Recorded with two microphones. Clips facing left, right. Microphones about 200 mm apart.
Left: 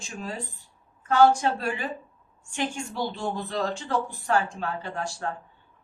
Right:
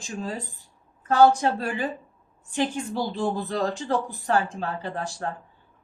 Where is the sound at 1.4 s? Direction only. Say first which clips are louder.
Right 2 dB; 35° right (ahead or behind).